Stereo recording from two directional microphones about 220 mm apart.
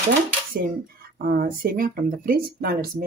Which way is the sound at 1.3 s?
40° right (ahead or behind).